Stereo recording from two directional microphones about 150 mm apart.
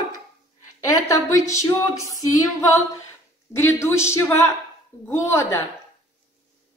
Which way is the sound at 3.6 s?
15° left (ahead or behind).